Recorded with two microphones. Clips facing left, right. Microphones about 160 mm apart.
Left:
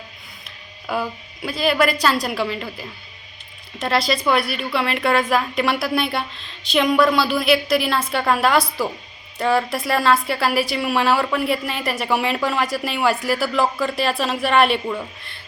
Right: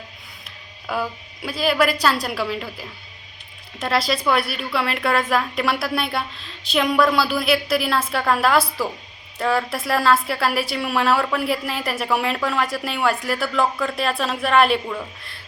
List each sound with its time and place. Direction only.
0.9 s a woman's voice: centre (ahead or behind)